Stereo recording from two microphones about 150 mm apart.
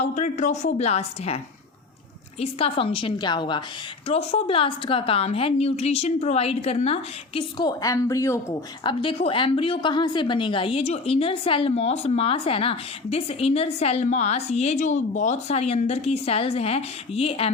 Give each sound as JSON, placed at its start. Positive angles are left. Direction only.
{"t": 0.0, "sound": "a woman's voice", "side_deg": 50}
{"t": 2.4, "sound": "a woman's voice", "side_deg": 40}
{"t": 4.0, "sound": "a woman's voice", "side_deg": 40}
{"t": 7.6, "sound": "speech", "side_deg": 25}
{"t": 8.8, "sound": "a woman's voice", "side_deg": 35}